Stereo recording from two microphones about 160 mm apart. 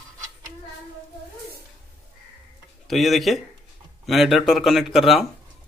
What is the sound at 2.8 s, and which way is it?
Speech, centre (ahead or behind).